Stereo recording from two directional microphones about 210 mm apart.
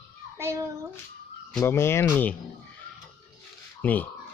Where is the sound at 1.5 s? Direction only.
10° left (ahead or behind).